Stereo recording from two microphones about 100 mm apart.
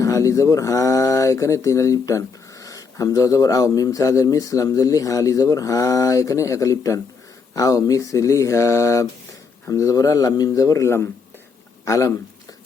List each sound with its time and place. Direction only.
0.0 s speech: 35° left (ahead or behind)